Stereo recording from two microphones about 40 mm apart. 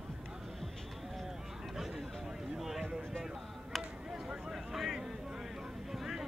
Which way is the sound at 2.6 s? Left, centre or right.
Centre.